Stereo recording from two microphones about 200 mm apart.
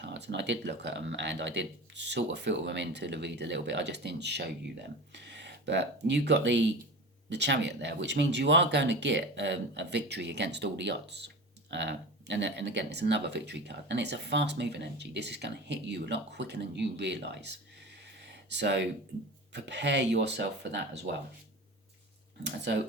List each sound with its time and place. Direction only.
0.0 s speech: 60° right (ahead or behind)
18.2 s a sound: 60° right (ahead or behind)
19.5 s speech: 60° right (ahead or behind)